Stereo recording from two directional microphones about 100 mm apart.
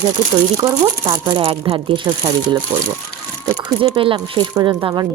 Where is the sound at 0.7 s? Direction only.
45° right (ahead or behind); by 2.0 s 65° right (ahead or behind).